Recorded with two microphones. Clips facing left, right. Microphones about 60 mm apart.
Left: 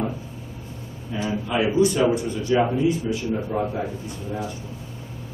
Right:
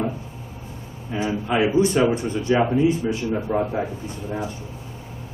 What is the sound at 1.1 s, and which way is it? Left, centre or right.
A man's voice, right.